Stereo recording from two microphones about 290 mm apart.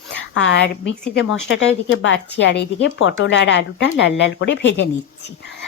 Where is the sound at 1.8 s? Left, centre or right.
Left.